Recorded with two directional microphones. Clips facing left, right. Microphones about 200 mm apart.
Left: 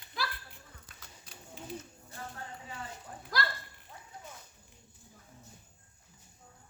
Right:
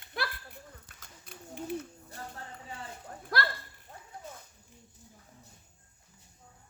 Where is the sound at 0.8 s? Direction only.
55° right (ahead or behind).